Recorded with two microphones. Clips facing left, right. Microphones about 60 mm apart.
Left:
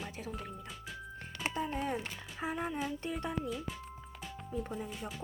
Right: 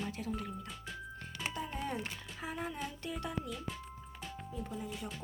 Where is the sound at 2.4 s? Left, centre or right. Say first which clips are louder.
Left 5 dB; centre.